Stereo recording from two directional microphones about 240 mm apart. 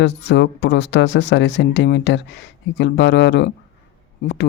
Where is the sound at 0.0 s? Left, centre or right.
Left.